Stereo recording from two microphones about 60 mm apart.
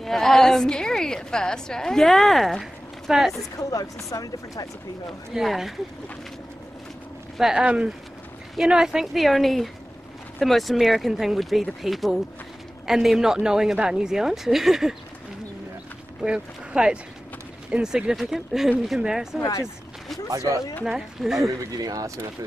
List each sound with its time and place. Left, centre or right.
0.0 s a woman's voice: centre
3.5 s speech: left
5.3 s speech: centre
7.3 s speech: centre
7.6 s speech: centre
16.2 s speech: centre
20.2 s speech: right
20.8 s speech: centre
21.7 s speech: right